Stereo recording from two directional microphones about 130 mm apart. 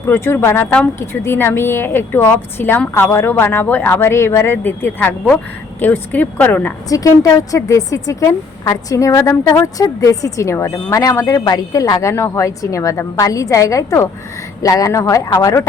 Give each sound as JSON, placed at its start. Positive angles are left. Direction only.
{"t": 0.0, "sound": "speech", "side_deg": 20}
{"t": 6.8, "sound": "speech", "side_deg": 25}